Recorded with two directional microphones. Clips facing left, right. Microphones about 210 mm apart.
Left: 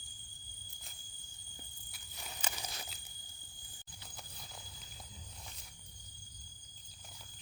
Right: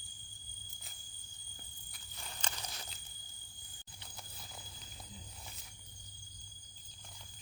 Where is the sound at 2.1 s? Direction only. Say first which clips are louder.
Left 1 dB; 10° left (ahead or behind).